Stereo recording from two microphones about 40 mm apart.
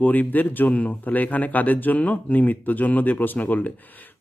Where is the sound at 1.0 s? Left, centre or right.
Left.